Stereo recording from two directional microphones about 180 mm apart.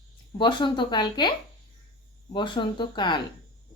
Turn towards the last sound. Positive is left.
turn(degrees=25)  # may be behind; listen again after turning